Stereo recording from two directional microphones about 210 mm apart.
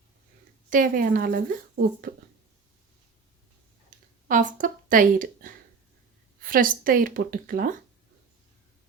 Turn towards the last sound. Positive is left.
turn(degrees=-40)  # may be behind; listen again after turning